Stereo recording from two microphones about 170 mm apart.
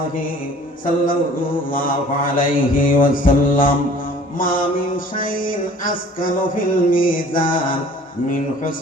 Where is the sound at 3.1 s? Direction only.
55° left (ahead or behind).